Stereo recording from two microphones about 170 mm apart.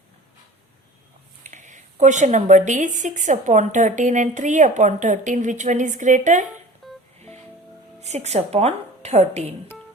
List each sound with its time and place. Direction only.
1.5 s speech: 45° right (ahead or behind)
6.8 s music: centre (ahead or behind)
8.0 s speech: 40° right (ahead or behind)